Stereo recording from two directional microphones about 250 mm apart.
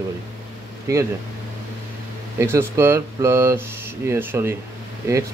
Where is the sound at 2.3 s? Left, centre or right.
Centre.